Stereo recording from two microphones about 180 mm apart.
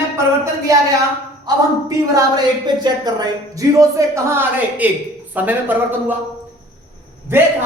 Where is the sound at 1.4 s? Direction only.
20° right (ahead or behind).